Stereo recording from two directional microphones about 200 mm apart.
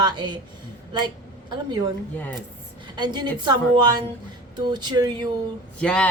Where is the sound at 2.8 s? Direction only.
20° right (ahead or behind).